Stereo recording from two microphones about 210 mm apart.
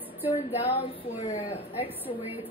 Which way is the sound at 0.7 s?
25° left (ahead or behind).